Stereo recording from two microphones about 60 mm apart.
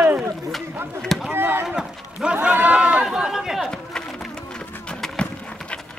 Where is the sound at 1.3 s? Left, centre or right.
Right.